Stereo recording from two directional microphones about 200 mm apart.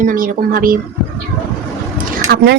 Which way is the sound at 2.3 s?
50° right (ahead or behind).